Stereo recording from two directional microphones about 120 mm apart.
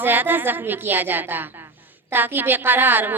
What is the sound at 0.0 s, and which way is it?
A woman's voice, 15° right (ahead or behind).